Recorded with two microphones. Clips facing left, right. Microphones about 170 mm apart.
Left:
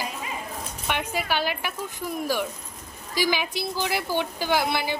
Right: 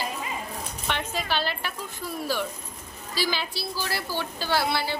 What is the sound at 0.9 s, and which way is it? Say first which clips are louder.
A woman's voice: left 2 dB; 10° left (ahead or behind).